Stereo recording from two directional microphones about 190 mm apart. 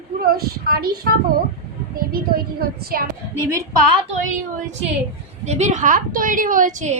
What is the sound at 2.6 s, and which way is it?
Speech, 55° right (ahead or behind).